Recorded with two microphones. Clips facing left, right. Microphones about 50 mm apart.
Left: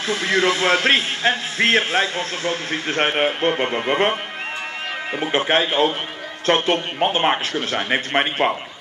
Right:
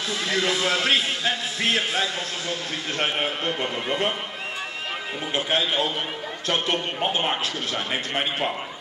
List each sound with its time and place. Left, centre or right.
0.1 s a man's voice: left
5.2 s a man's voice: left